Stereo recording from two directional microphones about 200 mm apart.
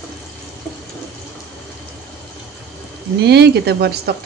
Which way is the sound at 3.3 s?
55° right (ahead or behind).